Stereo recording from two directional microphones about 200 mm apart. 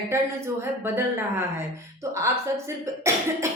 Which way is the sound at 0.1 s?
15° right (ahead or behind).